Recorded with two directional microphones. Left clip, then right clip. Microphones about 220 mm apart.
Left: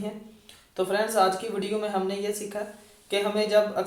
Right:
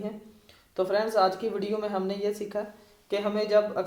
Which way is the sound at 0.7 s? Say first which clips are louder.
Even; 40° right (ahead or behind).